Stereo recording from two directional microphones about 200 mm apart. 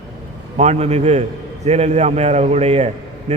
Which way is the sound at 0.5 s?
35° right (ahead or behind).